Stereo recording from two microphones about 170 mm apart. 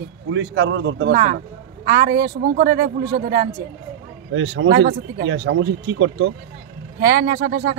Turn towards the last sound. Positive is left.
turn(degrees=-55)  # may be behind; listen again after turning